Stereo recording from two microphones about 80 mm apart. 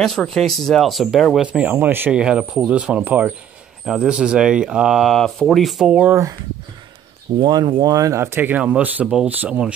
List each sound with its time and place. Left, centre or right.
0.0 s speech: centre
1.4 s speech: centre
2.1 s speech: centre
3.8 s speech: centre
5.9 s speech: centre
7.3 s speech: right
7.9 s speech: right
9.0 s speech: centre
9.3 s speech: centre